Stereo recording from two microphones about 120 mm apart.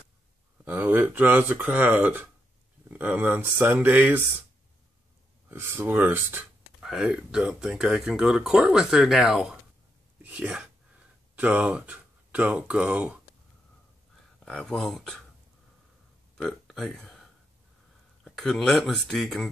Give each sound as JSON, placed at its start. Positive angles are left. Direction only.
{"t": 0.7, "sound": "speech", "side_deg": -15}
{"t": 5.5, "sound": "speech", "side_deg": -20}
{"t": 6.8, "sound": "speech", "side_deg": -5}
{"t": 14.4, "sound": "speech", "side_deg": 5}
{"t": 16.3, "sound": "a sound", "side_deg": 0}
{"t": 18.2, "sound": "speech", "side_deg": 5}